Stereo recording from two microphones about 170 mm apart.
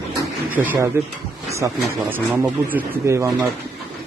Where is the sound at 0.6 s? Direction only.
15° right (ahead or behind).